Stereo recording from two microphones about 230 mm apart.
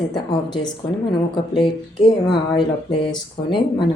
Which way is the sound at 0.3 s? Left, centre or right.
Centre.